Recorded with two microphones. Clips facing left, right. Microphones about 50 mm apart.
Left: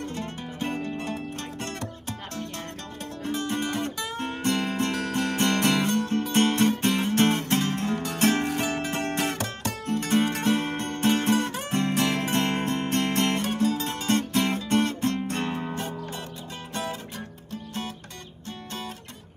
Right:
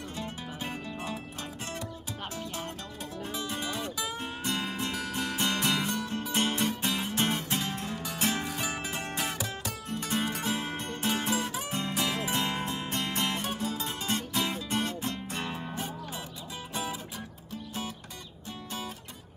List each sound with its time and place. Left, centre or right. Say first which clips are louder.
0.1 s music: left 4 dB; left
3.3 s guitar: left 7 dB; left
17.5 s music: left 3 dB; left